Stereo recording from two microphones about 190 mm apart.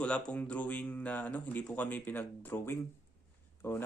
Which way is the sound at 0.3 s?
5° left (ahead or behind).